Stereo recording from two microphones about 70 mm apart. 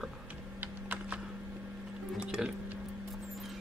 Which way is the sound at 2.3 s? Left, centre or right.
Centre.